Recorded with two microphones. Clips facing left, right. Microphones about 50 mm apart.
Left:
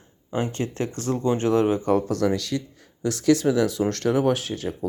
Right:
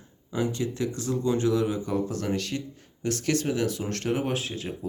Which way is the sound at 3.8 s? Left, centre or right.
Left.